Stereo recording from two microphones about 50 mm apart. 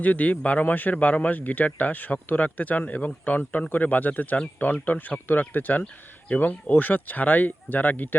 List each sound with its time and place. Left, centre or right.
0.0 s a man's voice: left